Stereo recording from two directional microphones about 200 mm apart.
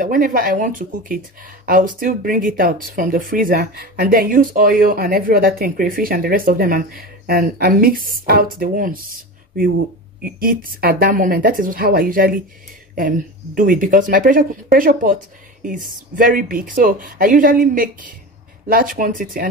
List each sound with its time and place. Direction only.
0.0 s speech: 45° right (ahead or behind)
10.2 s speech: 45° right (ahead or behind)
13.6 s speech: 40° right (ahead or behind)